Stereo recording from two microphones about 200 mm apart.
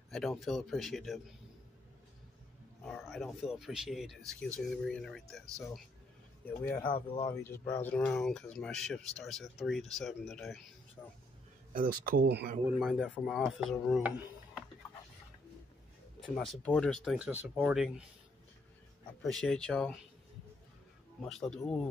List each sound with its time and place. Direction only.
0.4 s speech: centre (ahead or behind)
2.8 s speech: centre (ahead or behind)
6.9 s speech: 25° left (ahead or behind)
7.3 s speech: 10° left (ahead or behind)
11.0 s speech: 10° left (ahead or behind)
11.7 s speech: 45° right (ahead or behind)
12.6 s speech: 5° right (ahead or behind)
16.3 s speech: 5° left (ahead or behind)
19.2 s speech: 5° left (ahead or behind)
21.2 s speech: 5° left (ahead or behind)